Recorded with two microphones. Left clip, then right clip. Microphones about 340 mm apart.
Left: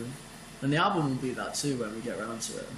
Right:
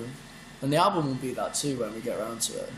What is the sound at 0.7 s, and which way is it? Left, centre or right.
Speech, centre.